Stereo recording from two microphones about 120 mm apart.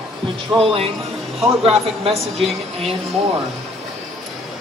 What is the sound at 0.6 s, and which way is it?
Speech, 55° right (ahead or behind).